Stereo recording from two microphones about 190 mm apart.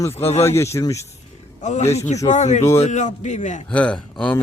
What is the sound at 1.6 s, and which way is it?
Speech, 35° left (ahead or behind).